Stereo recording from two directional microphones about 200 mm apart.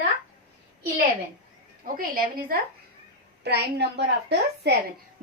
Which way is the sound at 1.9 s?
45° right (ahead or behind).